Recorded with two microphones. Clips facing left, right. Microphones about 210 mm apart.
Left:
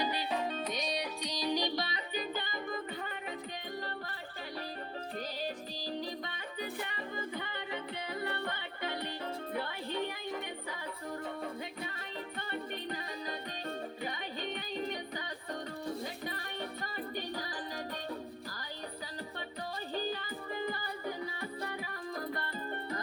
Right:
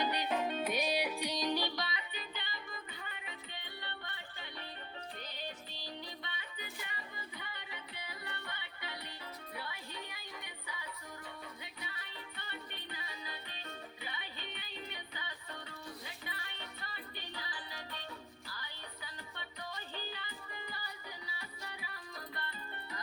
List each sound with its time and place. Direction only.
0.1 s music: centre (ahead or behind)
1.5 s music: 15° left (ahead or behind)
1.7 s music: 35° left (ahead or behind)
5.4 s music: 40° left (ahead or behind)
19.9 s music: 40° left (ahead or behind)